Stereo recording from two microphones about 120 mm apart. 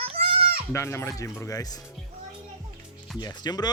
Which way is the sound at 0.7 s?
25° left (ahead or behind).